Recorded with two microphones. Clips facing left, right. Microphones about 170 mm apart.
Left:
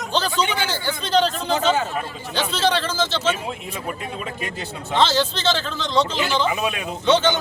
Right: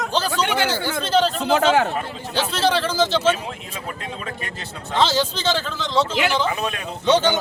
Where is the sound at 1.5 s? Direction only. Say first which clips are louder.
Right 4 dB; 70° right (ahead or behind).